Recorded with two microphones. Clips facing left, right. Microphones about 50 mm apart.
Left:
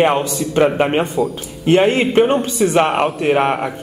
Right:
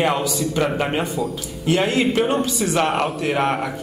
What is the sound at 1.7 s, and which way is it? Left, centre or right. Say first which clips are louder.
A man's voice: left 5 dB; left.